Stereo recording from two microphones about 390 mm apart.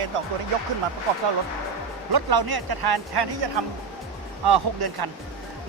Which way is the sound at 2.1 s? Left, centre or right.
Right.